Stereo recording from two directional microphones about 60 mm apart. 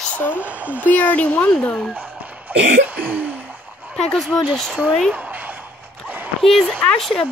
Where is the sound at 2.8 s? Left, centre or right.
Right.